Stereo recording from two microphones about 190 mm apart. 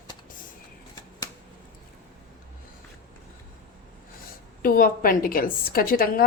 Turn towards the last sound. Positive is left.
turn(degrees=50)  # may be behind; listen again after turning